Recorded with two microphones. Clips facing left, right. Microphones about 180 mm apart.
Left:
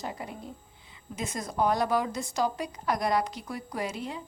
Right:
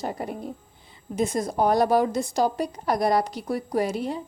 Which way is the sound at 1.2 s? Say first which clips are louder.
Right 5 dB; 35° right (ahead or behind).